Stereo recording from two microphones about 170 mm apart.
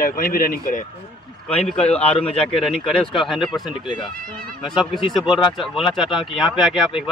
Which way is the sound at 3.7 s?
30° left (ahead or behind).